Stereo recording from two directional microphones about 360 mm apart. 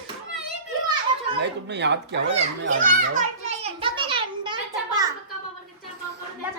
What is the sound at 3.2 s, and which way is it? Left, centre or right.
Children playing, centre.